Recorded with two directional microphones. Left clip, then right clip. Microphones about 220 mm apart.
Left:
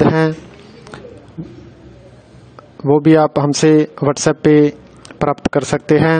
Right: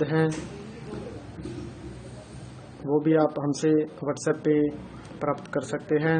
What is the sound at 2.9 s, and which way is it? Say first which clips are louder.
A man's voice: left 12 dB; 45° left (ahead or behind).